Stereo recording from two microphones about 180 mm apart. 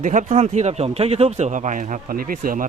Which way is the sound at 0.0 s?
45° right (ahead or behind).